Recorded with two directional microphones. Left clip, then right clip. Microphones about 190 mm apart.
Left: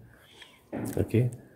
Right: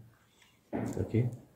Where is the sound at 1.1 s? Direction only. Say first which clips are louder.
Left 6 dB; 35° left (ahead or behind).